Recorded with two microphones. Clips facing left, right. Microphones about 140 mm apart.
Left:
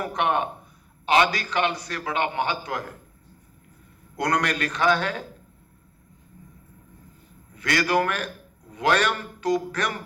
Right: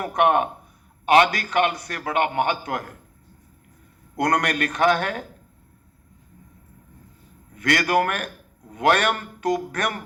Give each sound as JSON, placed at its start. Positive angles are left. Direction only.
{"t": 0.0, "sound": "a man's voice", "side_deg": -50}
{"t": 4.2, "sound": "a man's voice", "side_deg": -50}
{"t": 7.5, "sound": "a man's voice", "side_deg": -50}